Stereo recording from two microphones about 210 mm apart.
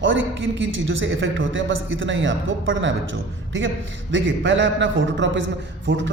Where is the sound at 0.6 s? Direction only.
65° right (ahead or behind).